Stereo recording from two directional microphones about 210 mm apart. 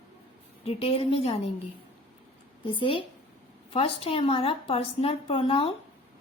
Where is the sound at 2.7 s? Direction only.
25° left (ahead or behind).